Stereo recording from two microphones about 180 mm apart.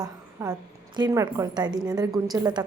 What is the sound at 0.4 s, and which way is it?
A woman's voice, 15° right (ahead or behind).